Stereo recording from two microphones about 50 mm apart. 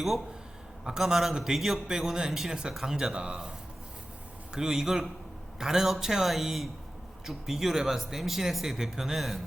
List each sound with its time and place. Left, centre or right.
0.9 s a man's voice: centre
4.5 s a man's voice: centre